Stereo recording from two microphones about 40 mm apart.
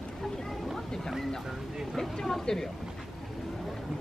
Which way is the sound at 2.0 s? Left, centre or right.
Centre.